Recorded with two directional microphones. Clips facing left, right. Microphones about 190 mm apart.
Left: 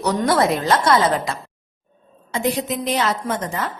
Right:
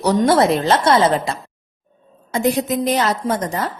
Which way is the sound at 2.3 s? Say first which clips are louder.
Right 4 dB; 45° right (ahead or behind).